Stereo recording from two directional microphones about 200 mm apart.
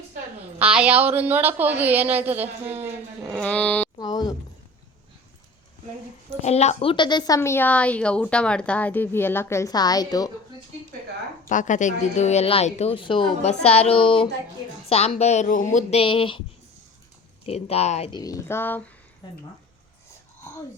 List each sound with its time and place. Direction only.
0.7 s speech: 5° right (ahead or behind)
3.2 s a sound: 5° left (ahead or behind)
3.9 s a sound: 20° left (ahead or behind)
6.4 s speech: 35° left (ahead or behind); by 10.3 s 20° left (ahead or behind)
11.4 s speech: 40° left (ahead or behind)
17.4 s speech: 30° left (ahead or behind)
18.1 s speech: 20° left (ahead or behind)